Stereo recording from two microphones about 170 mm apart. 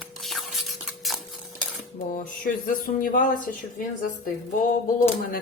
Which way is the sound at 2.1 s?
55° left (ahead or behind).